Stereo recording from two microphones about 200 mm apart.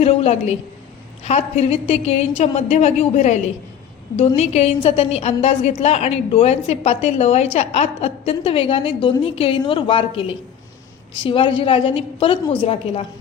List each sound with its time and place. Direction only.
0.0 s a woman's voice: 30° left (ahead or behind)